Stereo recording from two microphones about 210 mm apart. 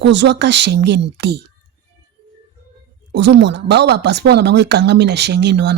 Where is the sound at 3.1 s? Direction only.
55° right (ahead or behind).